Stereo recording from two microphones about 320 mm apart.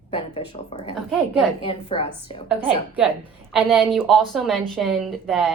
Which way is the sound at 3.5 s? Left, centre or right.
Centre.